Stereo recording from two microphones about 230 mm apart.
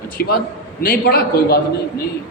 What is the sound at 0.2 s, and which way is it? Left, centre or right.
A man's voice, left.